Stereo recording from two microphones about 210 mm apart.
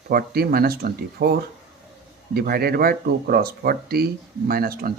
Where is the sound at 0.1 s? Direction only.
45° right (ahead or behind).